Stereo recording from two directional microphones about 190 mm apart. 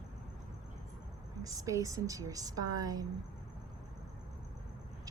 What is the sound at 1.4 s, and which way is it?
A woman's voice, 20° right (ahead or behind).